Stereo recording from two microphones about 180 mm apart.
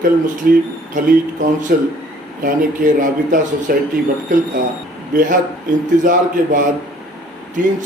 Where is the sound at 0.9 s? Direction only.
45° right (ahead or behind).